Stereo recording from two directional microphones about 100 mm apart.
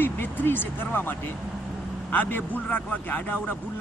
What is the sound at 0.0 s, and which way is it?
Speech, 20° left (ahead or behind).